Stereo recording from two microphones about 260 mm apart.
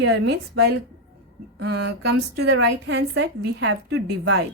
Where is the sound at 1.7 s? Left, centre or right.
Right.